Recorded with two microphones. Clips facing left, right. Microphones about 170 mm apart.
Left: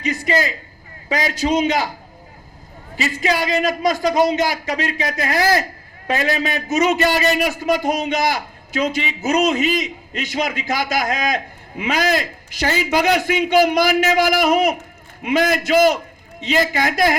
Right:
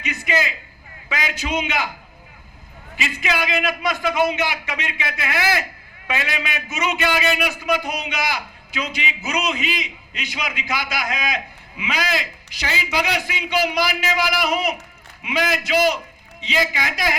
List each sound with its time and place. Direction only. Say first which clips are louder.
0.0 s a man's voice: left 4 dB; 35° left (ahead or behind)
2.9 s a man's voice: left 5 dB; 40° left (ahead or behind)